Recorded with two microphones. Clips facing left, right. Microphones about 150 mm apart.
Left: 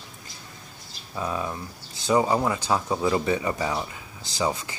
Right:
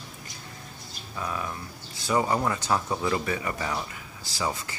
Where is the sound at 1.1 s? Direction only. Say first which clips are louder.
Left 4 dB; 25° left (ahead or behind).